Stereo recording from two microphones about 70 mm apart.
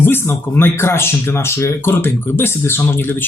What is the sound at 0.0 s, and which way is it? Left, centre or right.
Speech, left.